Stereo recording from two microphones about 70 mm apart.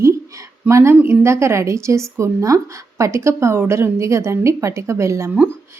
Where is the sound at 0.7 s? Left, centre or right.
Right.